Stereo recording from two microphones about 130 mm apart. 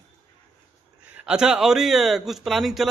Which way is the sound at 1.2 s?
5° right (ahead or behind).